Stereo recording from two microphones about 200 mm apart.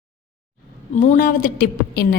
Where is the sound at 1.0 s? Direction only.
40° left (ahead or behind).